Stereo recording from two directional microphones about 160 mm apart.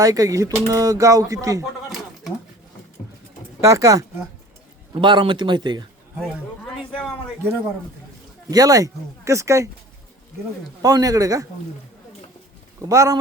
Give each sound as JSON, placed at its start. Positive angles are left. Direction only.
{"t": 0.0, "sound": "speech", "side_deg": -20}
{"t": 3.6, "sound": "speech", "side_deg": -20}
{"t": 4.9, "sound": "speech", "side_deg": -30}
{"t": 8.4, "sound": "speech", "side_deg": -20}
{"t": 10.8, "sound": "speech", "side_deg": -20}
{"t": 12.8, "sound": "speech", "side_deg": -20}